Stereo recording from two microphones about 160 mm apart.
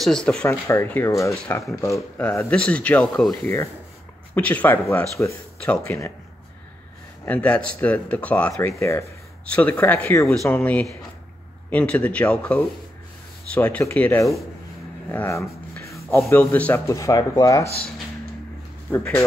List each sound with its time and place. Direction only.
0.0 s speech: 5° left (ahead or behind)
0.5 s speech: 20° left (ahead or behind)
1.4 s speech: 5° left (ahead or behind)
1.8 s speech: 20° left (ahead or behind)
4.4 s speech: 10° left (ahead or behind)
7.2 s speech: 10° left (ahead or behind)
15.0 s a sound: 15° left (ahead or behind)
16.3 s speech: 10° left (ahead or behind)
18.9 s speech: 15° left (ahead or behind)